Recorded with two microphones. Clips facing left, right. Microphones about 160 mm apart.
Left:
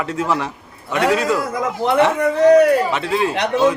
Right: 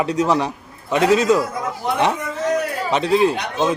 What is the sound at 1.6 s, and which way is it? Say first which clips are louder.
Speech: left 5 dB; 90° left.